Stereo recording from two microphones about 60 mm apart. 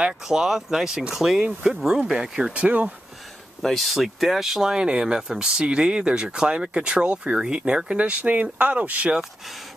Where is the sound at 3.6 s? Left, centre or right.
Centre; by 9.1 s right.